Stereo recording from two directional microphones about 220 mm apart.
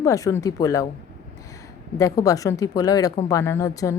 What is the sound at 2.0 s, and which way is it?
A woman's voice, 15° left (ahead or behind).